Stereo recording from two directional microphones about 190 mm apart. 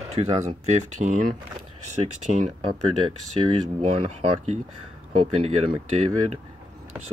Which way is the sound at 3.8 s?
35° right (ahead or behind).